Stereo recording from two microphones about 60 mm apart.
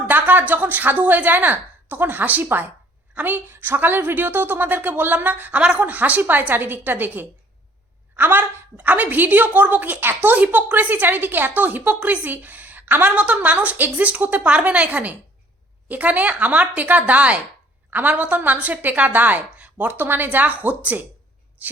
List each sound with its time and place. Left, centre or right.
0.1 s a woman's voice: right